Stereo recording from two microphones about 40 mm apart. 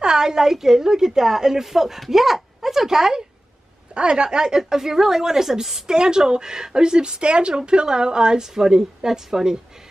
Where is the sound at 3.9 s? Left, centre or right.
Right.